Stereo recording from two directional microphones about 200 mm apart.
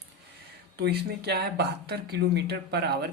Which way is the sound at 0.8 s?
55° right (ahead or behind).